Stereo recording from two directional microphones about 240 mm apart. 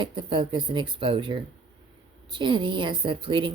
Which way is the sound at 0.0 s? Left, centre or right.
Centre.